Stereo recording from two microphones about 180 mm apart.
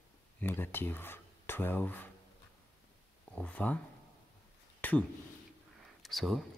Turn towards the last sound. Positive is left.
turn(degrees=0)  # may be behind; listen again after turning